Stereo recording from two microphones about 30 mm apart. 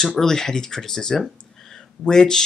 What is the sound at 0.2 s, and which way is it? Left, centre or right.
Speech, centre.